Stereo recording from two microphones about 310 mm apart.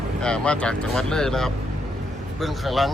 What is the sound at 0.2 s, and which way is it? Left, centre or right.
Speech, centre.